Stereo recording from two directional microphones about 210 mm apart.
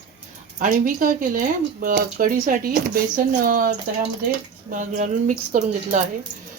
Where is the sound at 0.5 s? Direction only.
40° right (ahead or behind).